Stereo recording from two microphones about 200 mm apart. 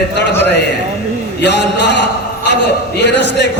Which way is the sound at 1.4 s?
60° left (ahead or behind).